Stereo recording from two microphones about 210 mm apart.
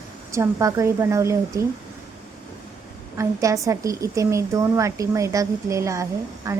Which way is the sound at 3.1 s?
15° right (ahead or behind).